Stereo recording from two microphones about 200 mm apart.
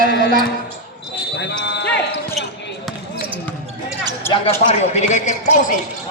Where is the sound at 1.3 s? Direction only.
60° left (ahead or behind).